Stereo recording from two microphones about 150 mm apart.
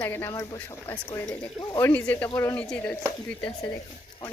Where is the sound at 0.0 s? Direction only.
15° left (ahead or behind).